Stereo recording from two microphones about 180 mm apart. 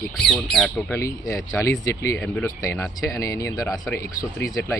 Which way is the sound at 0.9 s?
15° left (ahead or behind).